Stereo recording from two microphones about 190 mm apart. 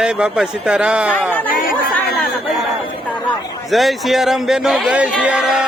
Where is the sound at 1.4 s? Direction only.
45° left (ahead or behind).